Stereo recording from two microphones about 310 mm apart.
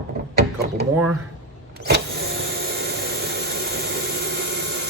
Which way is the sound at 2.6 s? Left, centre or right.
Right.